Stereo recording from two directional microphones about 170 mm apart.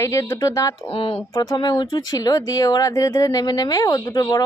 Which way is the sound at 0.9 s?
30° left (ahead or behind).